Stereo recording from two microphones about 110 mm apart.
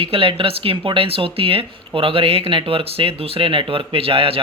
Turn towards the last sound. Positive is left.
turn(degrees=-55)  # may be behind; listen again after turning